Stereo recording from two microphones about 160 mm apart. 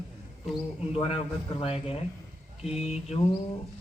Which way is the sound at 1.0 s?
35° left (ahead or behind).